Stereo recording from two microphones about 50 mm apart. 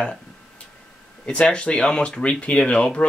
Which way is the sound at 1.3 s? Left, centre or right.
Centre.